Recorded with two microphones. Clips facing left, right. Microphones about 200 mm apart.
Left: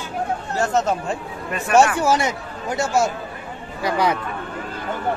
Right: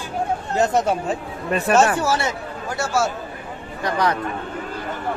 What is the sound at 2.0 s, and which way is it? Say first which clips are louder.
Speech: left 2 dB; 15° left (ahead or behind).